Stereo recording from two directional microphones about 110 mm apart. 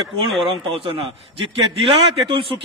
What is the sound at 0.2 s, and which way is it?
Speech, 55° right (ahead or behind).